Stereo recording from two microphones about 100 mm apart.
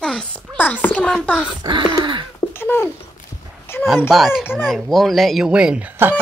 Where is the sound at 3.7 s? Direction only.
25° left (ahead or behind).